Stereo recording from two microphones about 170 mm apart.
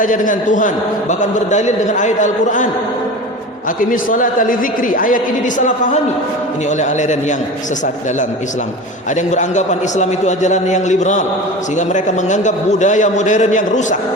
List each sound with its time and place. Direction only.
0.0 s a man's voice: 50° left (ahead or behind)
3.8 s a man's voice: 50° left (ahead or behind)
9.1 s a man's voice: 45° left (ahead or behind)